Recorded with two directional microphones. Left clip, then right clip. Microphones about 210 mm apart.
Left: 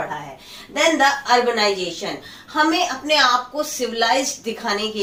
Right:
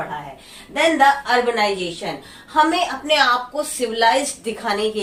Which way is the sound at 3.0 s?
10° right (ahead or behind).